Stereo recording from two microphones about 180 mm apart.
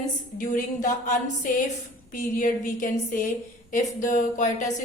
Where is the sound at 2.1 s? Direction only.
50° left (ahead or behind).